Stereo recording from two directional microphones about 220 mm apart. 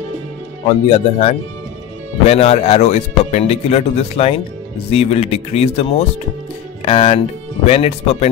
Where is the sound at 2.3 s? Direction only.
30° left (ahead or behind).